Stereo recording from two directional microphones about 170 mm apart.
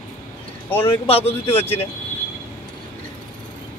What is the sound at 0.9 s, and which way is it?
Speech, 35° left (ahead or behind).